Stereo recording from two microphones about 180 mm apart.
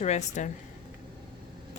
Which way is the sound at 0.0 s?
40° left (ahead or behind).